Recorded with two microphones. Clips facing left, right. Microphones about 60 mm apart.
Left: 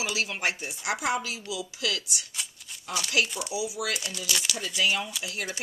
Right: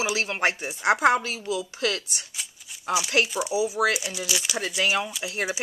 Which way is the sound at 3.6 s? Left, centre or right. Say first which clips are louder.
Right 8 dB; right.